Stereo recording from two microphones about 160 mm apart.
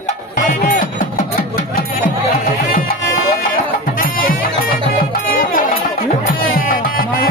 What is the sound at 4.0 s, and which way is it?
Music, 60° left (ahead or behind).